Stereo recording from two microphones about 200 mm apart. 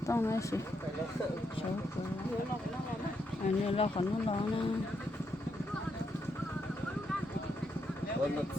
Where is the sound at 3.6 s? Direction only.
30° left (ahead or behind).